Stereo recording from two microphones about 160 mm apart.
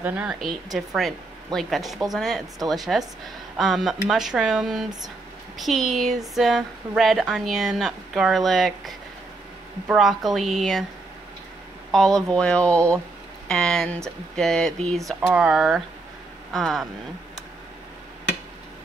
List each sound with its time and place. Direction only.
0.0 s a woman's voice: 10° right (ahead or behind)
11.9 s speech: centre (ahead or behind)